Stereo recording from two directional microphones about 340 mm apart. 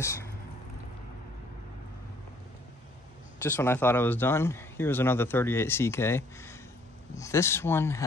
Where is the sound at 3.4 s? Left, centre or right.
Centre.